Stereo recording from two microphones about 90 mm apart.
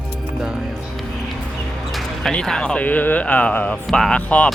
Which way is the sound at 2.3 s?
5° left (ahead or behind).